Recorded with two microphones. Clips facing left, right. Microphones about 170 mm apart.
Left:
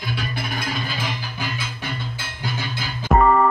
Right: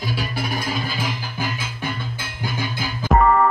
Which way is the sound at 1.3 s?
50° right (ahead or behind).